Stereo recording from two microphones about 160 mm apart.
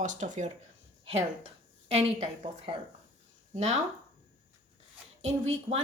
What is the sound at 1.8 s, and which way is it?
Speech, 40° right (ahead or behind).